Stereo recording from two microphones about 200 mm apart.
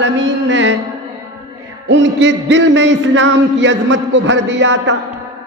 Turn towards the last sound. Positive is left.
turn(degrees=-65)  # may be behind; listen again after turning